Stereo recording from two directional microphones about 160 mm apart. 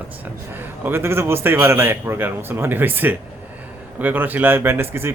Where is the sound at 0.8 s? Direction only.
15° right (ahead or behind).